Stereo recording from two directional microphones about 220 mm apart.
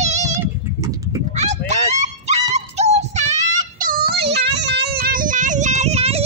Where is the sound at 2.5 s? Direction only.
30° right (ahead or behind).